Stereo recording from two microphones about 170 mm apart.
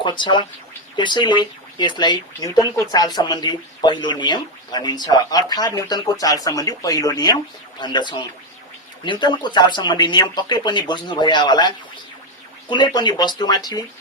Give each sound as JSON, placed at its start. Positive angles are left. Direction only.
{"t": 0.0, "sound": "speech", "side_deg": 25}
{"t": 12.7, "sound": "speech", "side_deg": 25}